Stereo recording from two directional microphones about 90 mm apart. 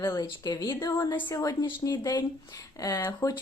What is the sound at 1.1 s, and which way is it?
Speech, 25° left (ahead or behind).